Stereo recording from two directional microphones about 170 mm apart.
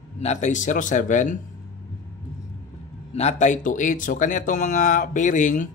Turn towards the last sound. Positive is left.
turn(degrees=50)  # may be behind; listen again after turning